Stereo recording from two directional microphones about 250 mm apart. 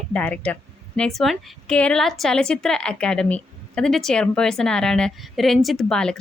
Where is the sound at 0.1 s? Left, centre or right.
Centre.